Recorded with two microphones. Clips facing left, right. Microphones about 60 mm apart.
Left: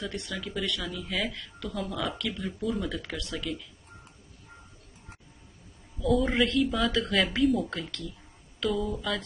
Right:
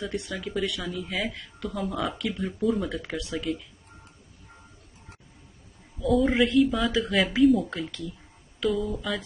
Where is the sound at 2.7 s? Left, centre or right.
Centre.